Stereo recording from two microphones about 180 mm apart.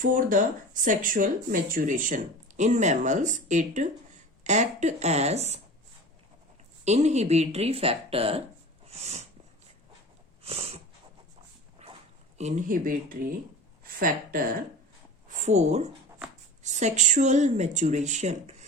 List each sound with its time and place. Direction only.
0.0 s speech: 50° right (ahead or behind)
6.8 s speech: 40° right (ahead or behind)
8.9 s a sound: 35° right (ahead or behind)
10.4 s a sound: 35° right (ahead or behind)
11.8 s dog: 35° right (ahead or behind)
12.4 s speech: 40° right (ahead or behind)
15.3 s speech: 40° right (ahead or behind)